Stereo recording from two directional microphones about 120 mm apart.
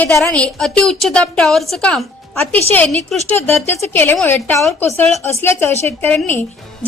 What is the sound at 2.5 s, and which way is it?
A woman's voice, 15° left (ahead or behind).